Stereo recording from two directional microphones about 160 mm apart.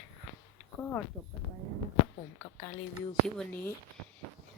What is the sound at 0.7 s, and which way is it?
Speech, 10° left (ahead or behind).